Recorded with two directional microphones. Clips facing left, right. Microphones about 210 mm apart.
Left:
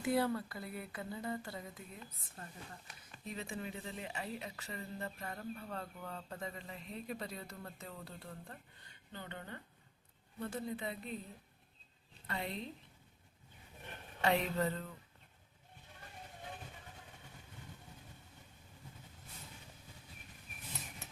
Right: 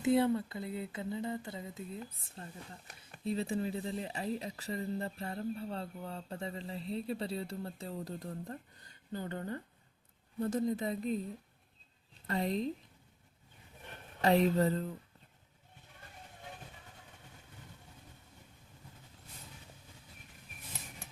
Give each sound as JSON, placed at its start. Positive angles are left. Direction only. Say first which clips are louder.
{"t": 0.0, "sound": "speech", "louder": "right 5 dB", "side_deg": -20}
{"t": 12.3, "sound": "speech", "louder": "right 9 dB", "side_deg": -40}
{"t": 14.2, "sound": "speech", "louder": "right 6 dB", "side_deg": -35}